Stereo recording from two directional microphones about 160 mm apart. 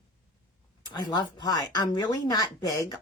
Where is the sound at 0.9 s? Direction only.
25° left (ahead or behind).